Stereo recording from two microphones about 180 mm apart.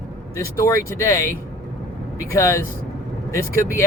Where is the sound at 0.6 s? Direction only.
15° left (ahead or behind).